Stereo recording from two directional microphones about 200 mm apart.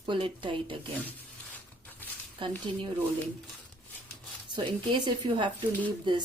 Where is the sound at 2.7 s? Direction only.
25° right (ahead or behind).